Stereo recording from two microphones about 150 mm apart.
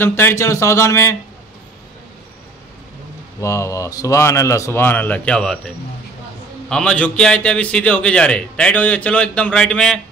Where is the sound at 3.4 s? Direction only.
20° left (ahead or behind).